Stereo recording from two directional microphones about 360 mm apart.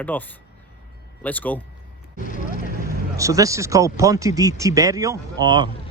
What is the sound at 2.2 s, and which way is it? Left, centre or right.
Speech, left.